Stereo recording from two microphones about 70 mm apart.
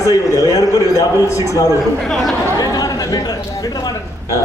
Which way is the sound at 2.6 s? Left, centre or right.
Left.